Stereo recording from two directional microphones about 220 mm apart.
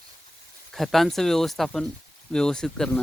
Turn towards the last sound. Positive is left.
turn(degrees=5)  # may be behind; listen again after turning